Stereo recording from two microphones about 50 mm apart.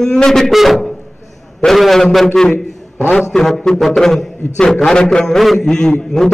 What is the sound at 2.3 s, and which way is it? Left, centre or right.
A man's voice, centre.